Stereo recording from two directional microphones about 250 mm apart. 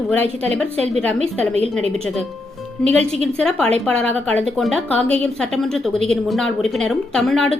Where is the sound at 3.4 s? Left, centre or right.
Centre.